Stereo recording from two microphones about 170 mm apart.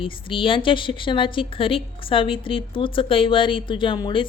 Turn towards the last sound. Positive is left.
turn(degrees=30)  # may be behind; listen again after turning